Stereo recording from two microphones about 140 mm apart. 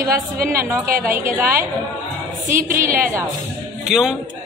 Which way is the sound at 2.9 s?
15° right (ahead or behind).